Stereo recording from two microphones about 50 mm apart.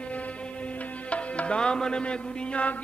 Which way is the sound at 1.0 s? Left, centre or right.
Left.